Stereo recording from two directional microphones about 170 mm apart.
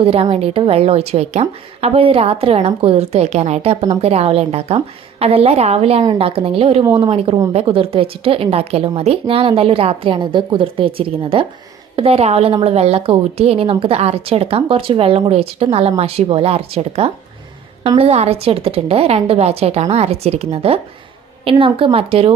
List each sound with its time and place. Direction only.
0.0 s a woman's voice: 35° right (ahead or behind)
6.8 s a woman's voice: 15° right (ahead or behind)
7.1 s a woman's voice: 35° right (ahead or behind)